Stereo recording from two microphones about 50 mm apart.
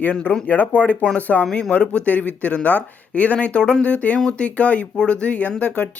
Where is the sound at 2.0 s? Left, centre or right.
Left.